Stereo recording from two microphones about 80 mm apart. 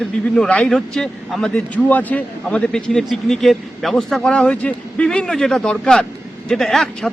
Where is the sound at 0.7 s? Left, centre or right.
Centre.